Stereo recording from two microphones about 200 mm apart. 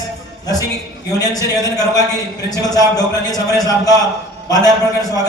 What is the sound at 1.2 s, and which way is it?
Speech, 20° left (ahead or behind).